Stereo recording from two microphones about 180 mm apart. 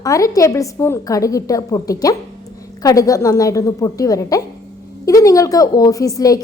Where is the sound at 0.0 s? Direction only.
20° left (ahead or behind).